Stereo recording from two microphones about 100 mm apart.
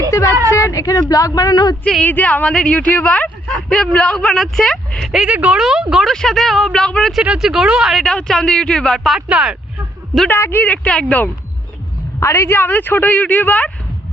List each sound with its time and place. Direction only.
0.5 s a woman's voice: 30° left (ahead or behind)
1.8 s speech: 10° left (ahead or behind)
5.3 s speech: 15° right (ahead or behind); by 7.2 s 5° left (ahead or behind)
7.2 s speech: 5° right (ahead or behind)
9.3 s speech: 10° right (ahead or behind)
10.2 s speech: 20° left (ahead or behind)
12.2 s a man's voice: 30° left (ahead or behind)